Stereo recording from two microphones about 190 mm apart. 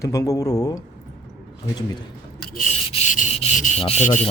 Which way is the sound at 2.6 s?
40° left (ahead or behind).